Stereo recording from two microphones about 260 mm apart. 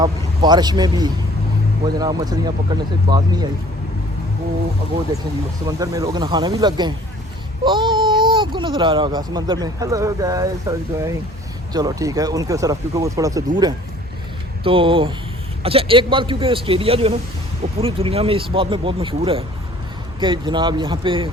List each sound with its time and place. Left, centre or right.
0.0 s speech: centre
5.6 s speech: centre
14.6 s speech: centre